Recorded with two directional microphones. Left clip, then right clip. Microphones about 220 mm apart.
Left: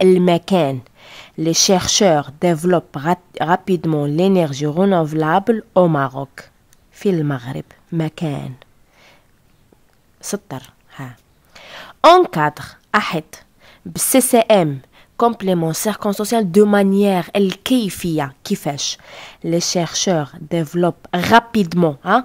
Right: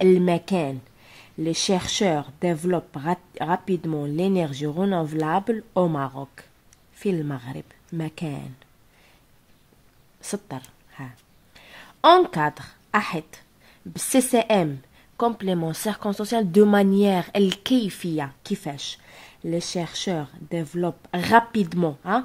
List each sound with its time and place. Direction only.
0.0 s speech: 35° left (ahead or behind)
10.2 s speech: 30° left (ahead or behind)